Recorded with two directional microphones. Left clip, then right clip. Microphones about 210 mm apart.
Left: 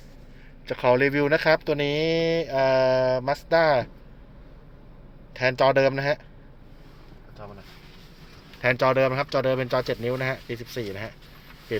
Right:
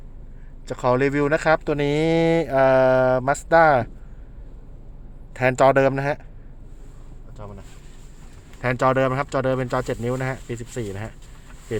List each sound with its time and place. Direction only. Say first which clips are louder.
0.7 s speech: even; 10° right (ahead or behind)
5.3 s speech: right 4 dB; 15° right (ahead or behind)
8.6 s speech: right 1 dB; 10° right (ahead or behind)